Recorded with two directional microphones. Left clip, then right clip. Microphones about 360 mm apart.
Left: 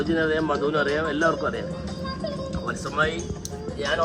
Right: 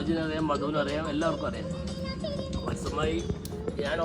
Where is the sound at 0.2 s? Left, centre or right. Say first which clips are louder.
Left 6 dB; centre.